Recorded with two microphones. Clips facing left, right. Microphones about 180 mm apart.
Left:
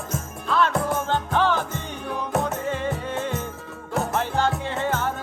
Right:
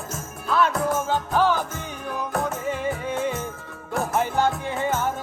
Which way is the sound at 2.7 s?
10° right (ahead or behind).